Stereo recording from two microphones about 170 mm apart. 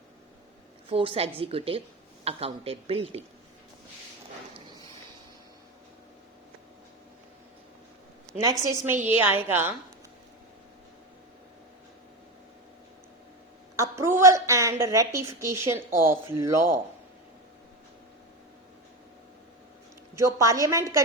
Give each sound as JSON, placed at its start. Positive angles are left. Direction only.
{"t": 0.9, "sound": "speech", "side_deg": -30}
{"t": 8.4, "sound": "a woman's voice", "side_deg": -20}
{"t": 13.7, "sound": "a woman's voice", "side_deg": -20}
{"t": 20.1, "sound": "a woman's voice", "side_deg": -20}